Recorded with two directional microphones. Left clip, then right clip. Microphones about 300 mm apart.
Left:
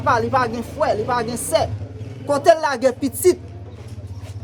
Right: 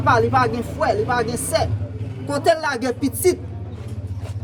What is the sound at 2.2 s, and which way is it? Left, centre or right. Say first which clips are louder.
Speech: left 4 dB; centre.